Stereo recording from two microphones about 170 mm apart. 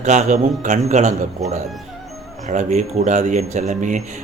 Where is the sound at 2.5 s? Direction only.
45° right (ahead or behind).